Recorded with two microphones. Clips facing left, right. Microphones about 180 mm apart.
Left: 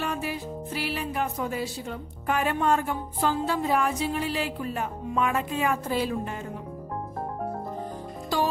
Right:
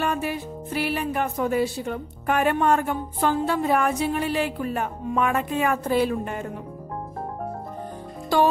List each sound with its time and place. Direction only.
0.0 s music: 55° right (ahead or behind)